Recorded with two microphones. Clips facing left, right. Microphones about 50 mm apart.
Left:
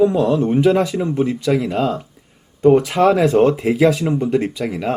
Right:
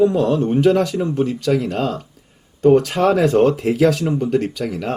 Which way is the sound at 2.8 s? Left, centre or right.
Centre.